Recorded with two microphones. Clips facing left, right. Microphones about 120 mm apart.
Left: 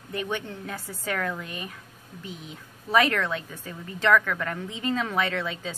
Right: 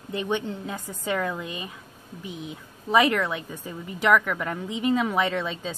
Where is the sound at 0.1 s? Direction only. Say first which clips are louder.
Right 4 dB; 20° right (ahead or behind).